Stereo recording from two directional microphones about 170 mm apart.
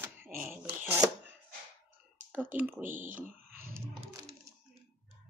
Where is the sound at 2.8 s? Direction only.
50° right (ahead or behind).